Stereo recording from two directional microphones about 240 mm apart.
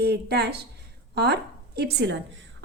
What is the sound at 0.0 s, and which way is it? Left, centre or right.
A woman's voice, right.